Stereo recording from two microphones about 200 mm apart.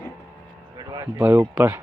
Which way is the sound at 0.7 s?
20° right (ahead or behind).